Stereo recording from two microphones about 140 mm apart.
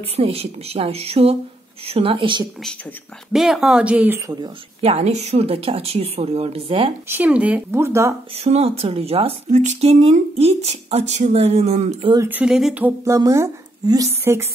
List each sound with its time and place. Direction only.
0.1 s speech: 45° right (ahead or behind)
3.3 s speech: 5° right (ahead or behind)
4.8 s speech: 50° right (ahead or behind)
7.1 s speech: 10° right (ahead or behind)
8.5 s speech: 45° right (ahead or behind)
12.2 s speech: 10° right (ahead or behind)
13.0 s a woman's voice: 20° right (ahead or behind)